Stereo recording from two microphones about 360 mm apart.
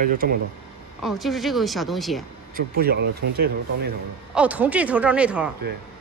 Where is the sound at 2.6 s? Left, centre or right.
Right.